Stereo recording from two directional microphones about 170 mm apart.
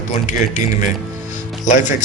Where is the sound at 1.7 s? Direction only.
45° left (ahead or behind).